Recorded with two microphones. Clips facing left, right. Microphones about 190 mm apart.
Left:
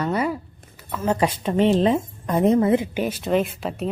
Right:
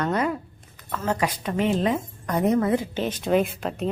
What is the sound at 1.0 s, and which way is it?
A woman's voice, 25° left (ahead or behind).